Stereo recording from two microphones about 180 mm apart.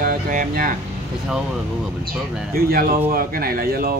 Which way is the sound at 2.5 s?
55° right (ahead or behind).